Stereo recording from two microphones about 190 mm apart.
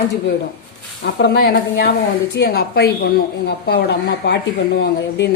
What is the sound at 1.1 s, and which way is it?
A woman's voice, 60° left (ahead or behind).